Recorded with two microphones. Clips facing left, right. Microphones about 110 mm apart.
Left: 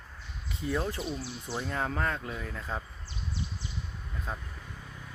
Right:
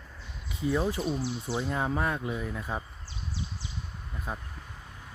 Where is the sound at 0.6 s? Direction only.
10° right (ahead or behind).